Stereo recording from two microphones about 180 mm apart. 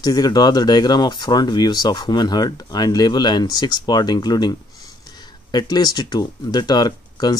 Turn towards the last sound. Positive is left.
turn(degrees=20)  # may be behind; listen again after turning